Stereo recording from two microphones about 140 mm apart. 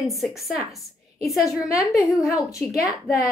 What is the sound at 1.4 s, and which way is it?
A woman's voice, 25° left (ahead or behind).